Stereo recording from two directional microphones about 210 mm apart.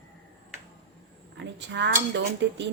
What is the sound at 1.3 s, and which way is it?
Speech, 55° right (ahead or behind).